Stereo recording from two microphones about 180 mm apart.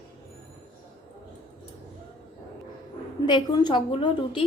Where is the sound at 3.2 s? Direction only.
25° left (ahead or behind).